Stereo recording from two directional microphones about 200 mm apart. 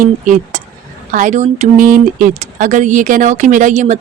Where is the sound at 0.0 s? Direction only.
40° right (ahead or behind).